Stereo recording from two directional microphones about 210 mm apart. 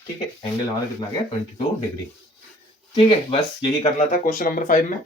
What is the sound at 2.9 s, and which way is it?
Speech, 25° left (ahead or behind).